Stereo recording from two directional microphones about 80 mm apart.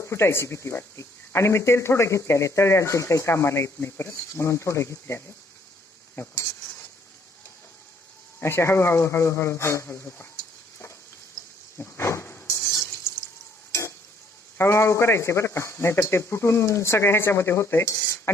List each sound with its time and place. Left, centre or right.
0.1 s speech: left
8.4 s speech: left
11.8 s water: left
14.6 s speech: left